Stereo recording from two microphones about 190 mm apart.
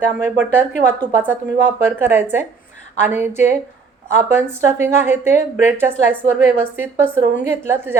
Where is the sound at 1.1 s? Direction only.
10° right (ahead or behind).